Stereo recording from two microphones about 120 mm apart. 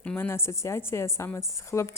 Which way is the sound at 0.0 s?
15° left (ahead or behind).